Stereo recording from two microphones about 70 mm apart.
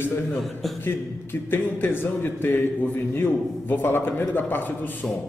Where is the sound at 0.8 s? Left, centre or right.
Left.